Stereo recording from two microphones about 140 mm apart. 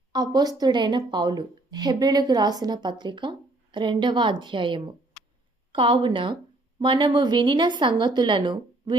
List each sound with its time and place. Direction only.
0.1 s a woman's voice: 30° right (ahead or behind)